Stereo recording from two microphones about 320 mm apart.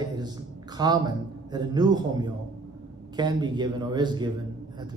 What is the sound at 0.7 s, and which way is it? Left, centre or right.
Speech, centre.